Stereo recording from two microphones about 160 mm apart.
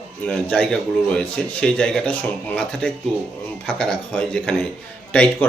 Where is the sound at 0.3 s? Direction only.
5° left (ahead or behind).